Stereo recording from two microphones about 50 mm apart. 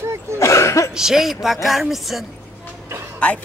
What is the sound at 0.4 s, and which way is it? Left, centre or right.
Cough, left.